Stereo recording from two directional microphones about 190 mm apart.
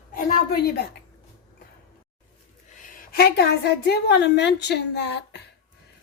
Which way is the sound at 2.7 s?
45° left (ahead or behind).